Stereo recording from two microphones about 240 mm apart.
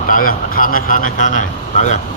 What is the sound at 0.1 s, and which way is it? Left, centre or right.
Speech, left.